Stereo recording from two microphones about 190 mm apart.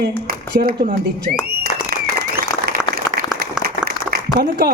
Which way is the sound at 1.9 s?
50° right (ahead or behind).